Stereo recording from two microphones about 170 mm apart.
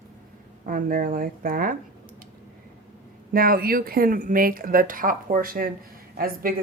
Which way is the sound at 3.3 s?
60° right (ahead or behind).